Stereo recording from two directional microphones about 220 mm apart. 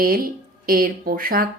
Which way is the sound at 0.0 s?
40° right (ahead or behind).